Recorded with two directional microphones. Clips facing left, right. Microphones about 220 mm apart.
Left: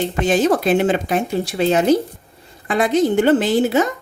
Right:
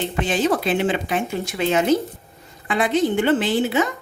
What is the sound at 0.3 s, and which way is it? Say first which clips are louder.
A woman's voice: left 5 dB; 45° left (ahead or behind).